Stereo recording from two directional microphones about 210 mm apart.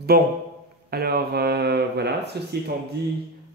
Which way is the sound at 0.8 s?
50° right (ahead or behind).